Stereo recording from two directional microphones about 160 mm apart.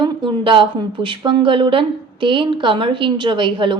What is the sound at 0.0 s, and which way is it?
A woman's voice, 30° right (ahead or behind).